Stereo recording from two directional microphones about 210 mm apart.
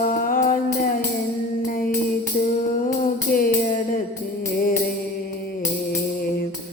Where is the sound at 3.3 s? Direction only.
45° left (ahead or behind).